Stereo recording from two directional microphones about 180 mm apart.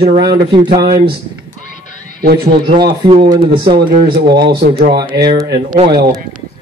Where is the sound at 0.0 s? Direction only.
60° right (ahead or behind).